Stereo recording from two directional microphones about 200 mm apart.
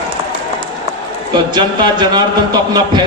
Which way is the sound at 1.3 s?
20° right (ahead or behind).